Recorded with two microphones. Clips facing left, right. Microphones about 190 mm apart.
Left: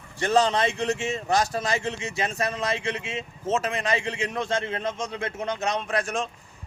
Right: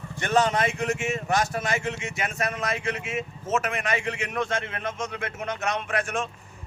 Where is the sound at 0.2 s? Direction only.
30° left (ahead or behind).